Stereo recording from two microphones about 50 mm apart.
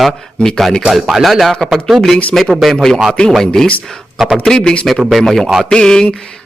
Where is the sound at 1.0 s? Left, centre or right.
Centre.